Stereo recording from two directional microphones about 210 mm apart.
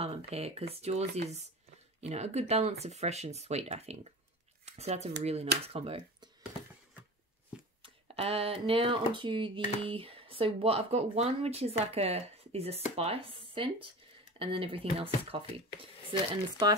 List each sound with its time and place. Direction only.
0.0 s speech: 30° right (ahead or behind)
7.8 s speech: 25° right (ahead or behind)